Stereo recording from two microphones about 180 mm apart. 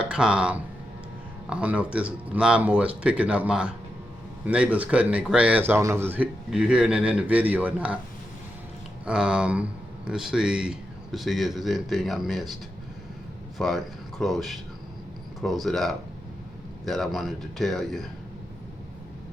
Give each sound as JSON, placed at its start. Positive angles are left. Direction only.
{"t": 0.0, "sound": "a man's voice", "side_deg": -5}
{"t": 9.0, "sound": "a man's voice", "side_deg": -5}
{"t": 13.6, "sound": "a man's voice", "side_deg": 0}